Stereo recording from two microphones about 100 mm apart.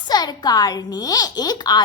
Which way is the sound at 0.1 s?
45° left (ahead or behind).